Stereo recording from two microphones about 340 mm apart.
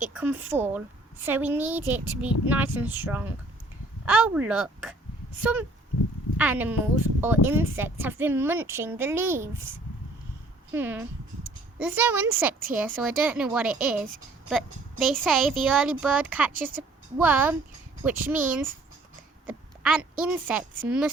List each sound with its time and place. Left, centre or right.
0.1 s a woman's voice: centre
10.7 s a woman's voice: centre
16.5 s speech: right
17.2 s a woman's voice: centre
18.4 s speech: right
19.5 s a woman's voice: centre